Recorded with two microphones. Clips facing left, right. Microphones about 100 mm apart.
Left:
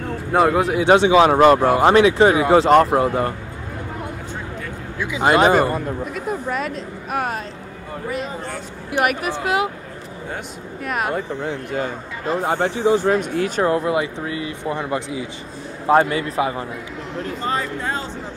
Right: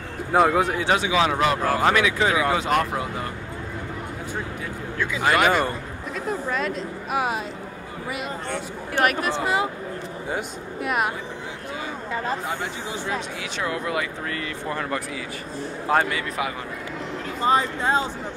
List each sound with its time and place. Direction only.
0.3 s speech: centre (ahead or behind)
0.7 s speech: 20° left (ahead or behind)
1.0 s speech: 35° left (ahead or behind)
1.6 s speech: 25° left (ahead or behind)
3.0 s speech: 45° left (ahead or behind)
4.9 s speech: 15° left (ahead or behind)
5.2 s speech: 30° left (ahead or behind)
6.1 s speech: 5° left (ahead or behind)
8.5 s speech: 5° left (ahead or behind)
10.3 s speech: 5° right (ahead or behind)
11.1 s speech: 55° left (ahead or behind); by 16.6 s 30° left (ahead or behind)
17.4 s speech: 20° right (ahead or behind)